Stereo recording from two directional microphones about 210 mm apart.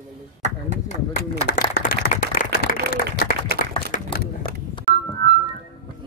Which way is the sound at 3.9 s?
40° left (ahead or behind).